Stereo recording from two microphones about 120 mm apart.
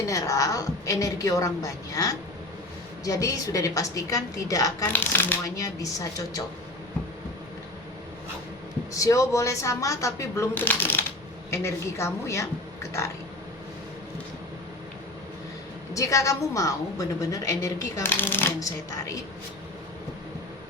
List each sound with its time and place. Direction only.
0.0 s a woman's voice: 25° left (ahead or behind)
4.9 s a woman's voice: 15° left (ahead or behind)
8.9 s a woman's voice: 25° left (ahead or behind)
16.0 s a woman's voice: 25° left (ahead or behind)